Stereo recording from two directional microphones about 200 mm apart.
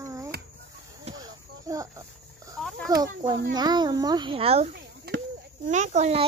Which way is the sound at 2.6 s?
Centre (ahead or behind).